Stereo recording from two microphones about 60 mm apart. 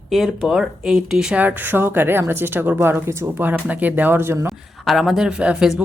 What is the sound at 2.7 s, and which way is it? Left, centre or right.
Speech, right.